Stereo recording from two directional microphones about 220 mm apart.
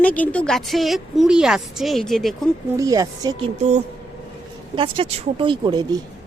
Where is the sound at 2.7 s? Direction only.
15° right (ahead or behind).